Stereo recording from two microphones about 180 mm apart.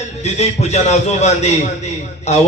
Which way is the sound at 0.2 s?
35° left (ahead or behind).